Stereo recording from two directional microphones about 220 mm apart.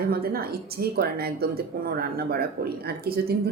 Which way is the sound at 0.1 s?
45° right (ahead or behind).